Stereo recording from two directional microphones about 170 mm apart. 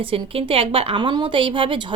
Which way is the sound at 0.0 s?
30° right (ahead or behind).